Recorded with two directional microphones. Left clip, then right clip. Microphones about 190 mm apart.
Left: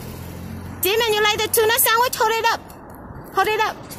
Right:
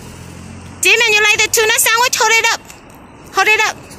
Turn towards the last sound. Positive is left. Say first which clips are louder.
# right 7 dB
turn(degrees=-5)  # may be behind; listen again after turning